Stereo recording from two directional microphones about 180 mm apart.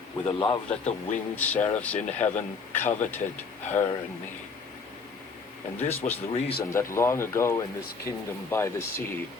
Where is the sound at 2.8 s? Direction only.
10° left (ahead or behind).